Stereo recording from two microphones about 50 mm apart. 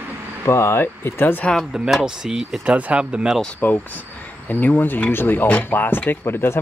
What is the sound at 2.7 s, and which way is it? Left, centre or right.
Speech, right.